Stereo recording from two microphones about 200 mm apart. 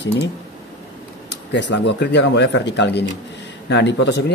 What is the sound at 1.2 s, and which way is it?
Speech, 65° left (ahead or behind).